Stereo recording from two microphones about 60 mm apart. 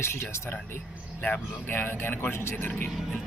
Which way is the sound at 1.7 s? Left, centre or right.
Left.